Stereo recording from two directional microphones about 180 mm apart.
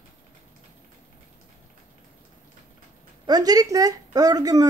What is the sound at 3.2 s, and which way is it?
Speech, 20° right (ahead or behind).